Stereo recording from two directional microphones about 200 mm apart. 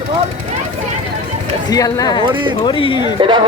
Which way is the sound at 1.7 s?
20° left (ahead or behind).